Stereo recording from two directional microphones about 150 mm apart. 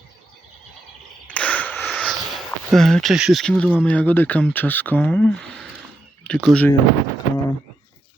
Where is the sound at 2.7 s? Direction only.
Centre (ahead or behind).